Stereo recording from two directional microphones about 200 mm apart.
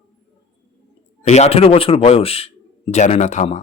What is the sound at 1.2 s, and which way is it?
A man's voice, 35° left (ahead or behind).